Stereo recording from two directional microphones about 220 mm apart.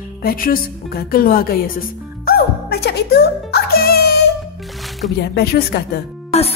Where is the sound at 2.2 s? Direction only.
45° left (ahead or behind).